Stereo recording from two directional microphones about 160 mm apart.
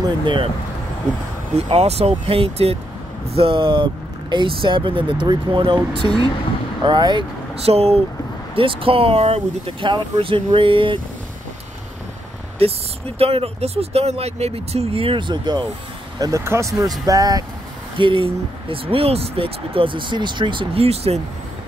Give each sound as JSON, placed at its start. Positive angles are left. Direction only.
{"t": 0.0, "sound": "speech", "side_deg": -30}
{"t": 1.7, "sound": "speech", "side_deg": -40}
{"t": 6.8, "sound": "speech", "side_deg": -30}
{"t": 12.5, "sound": "speech", "side_deg": -40}